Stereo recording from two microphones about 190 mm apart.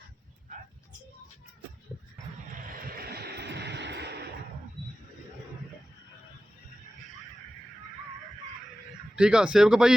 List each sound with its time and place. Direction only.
2.6 s music: 50° right (ahead or behind)
9.1 s speech: 5° right (ahead or behind)